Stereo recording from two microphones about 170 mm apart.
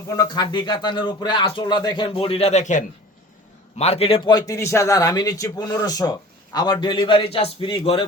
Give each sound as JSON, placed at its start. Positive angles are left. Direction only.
{"t": 0.2, "sound": "a man's voice", "side_deg": 25}